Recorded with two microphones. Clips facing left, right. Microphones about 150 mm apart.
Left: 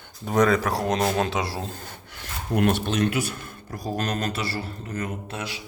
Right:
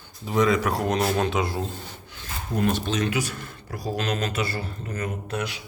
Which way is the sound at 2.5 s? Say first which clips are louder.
Left 2 dB; 65° left (ahead or behind).